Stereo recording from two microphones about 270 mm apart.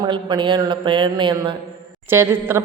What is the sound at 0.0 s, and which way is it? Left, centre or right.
A woman's voice, centre.